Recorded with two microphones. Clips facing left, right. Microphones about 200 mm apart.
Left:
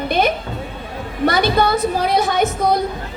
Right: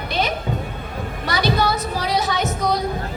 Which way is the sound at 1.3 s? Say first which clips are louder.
Left 4 dB; 55° left (ahead or behind).